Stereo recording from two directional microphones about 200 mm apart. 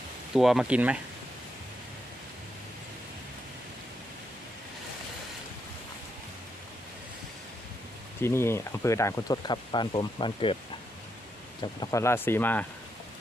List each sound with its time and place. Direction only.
0.3 s speech: centre (ahead or behind)
8.2 s speech: 10° left (ahead or behind)
11.6 s speech: 20° left (ahead or behind)